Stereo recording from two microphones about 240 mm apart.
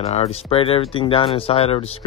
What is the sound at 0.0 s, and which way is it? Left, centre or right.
Speech, left.